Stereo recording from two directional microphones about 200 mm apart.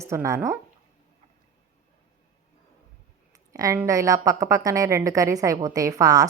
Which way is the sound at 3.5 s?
15° right (ahead or behind).